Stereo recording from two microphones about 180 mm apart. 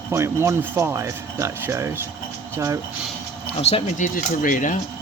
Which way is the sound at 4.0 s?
50° left (ahead or behind).